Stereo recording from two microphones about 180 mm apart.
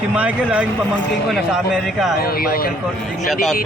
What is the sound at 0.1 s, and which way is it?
A man's voice, 5° right (ahead or behind).